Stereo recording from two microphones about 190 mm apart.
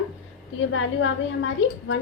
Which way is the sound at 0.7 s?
90° left.